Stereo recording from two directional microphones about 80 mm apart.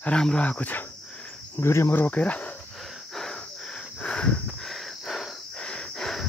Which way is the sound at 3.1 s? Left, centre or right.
Centre.